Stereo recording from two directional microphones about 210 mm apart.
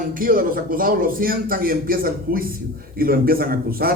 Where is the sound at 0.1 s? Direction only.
40° right (ahead or behind).